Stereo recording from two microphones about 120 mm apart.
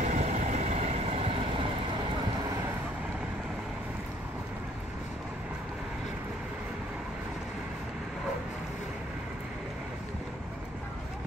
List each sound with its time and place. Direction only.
0.0 s vehicle: 80° right; by 1.7 s 55° right (ahead or behind)